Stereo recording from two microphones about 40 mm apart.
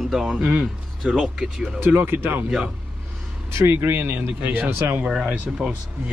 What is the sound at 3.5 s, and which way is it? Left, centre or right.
Speech, right.